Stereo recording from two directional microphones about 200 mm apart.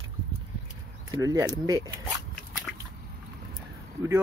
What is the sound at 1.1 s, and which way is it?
Speech, 15° right (ahead or behind).